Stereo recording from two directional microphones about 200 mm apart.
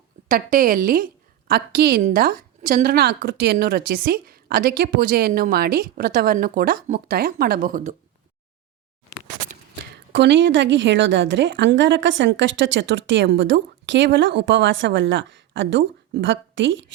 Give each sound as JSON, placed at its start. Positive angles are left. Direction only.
{"t": 0.3, "sound": "a woman's voice", "side_deg": -45}
{"t": 9.9, "sound": "a woman's voice", "side_deg": -60}